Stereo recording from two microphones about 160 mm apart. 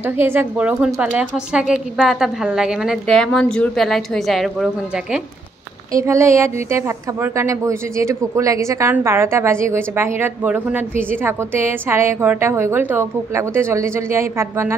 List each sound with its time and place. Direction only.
0.0 s a woman's voice: 15° right (ahead or behind)
5.9 s a woman's voice: 20° right (ahead or behind)